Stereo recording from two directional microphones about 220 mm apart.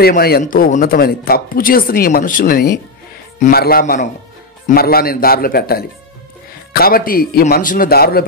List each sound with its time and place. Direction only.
0.0 s speech: 45° left (ahead or behind)